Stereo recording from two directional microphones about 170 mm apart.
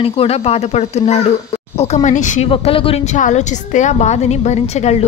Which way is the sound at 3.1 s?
45° left (ahead or behind).